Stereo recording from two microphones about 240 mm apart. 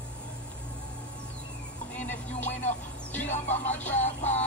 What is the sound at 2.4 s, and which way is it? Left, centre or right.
Vehicle, left.